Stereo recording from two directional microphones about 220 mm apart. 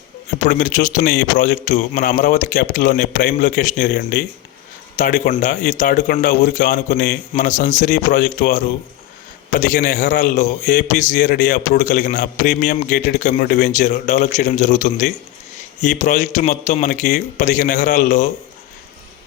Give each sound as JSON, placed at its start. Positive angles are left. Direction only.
{"t": 0.6, "sound": "a man's voice", "side_deg": 35}